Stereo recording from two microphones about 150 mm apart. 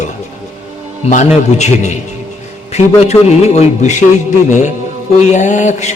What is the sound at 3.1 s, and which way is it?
Speech, 45° left (ahead or behind).